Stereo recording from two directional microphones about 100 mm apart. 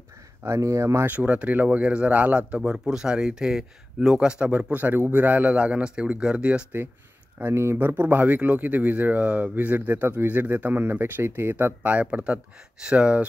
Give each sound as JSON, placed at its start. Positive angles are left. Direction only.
{"t": 0.4, "sound": "speech", "side_deg": -30}
{"t": 1.0, "sound": "a man's voice", "side_deg": -15}